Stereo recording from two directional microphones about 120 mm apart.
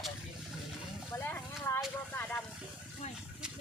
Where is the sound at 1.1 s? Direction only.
20° left (ahead or behind).